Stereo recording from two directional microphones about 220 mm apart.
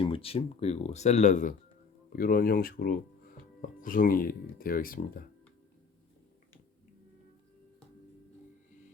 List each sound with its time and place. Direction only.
0.0 s speech: 25° left (ahead or behind)